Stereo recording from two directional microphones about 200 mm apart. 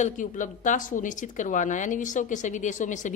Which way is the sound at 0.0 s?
40° left (ahead or behind).